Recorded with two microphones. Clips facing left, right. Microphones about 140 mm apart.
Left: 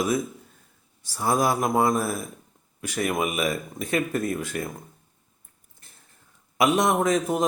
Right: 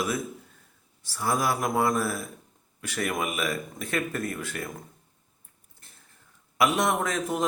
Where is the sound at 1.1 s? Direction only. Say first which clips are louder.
Left 4 dB; 20° left (ahead or behind).